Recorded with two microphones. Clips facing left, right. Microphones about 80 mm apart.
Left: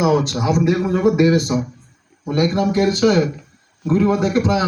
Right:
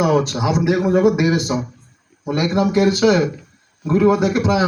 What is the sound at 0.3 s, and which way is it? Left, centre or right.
A man's voice, right.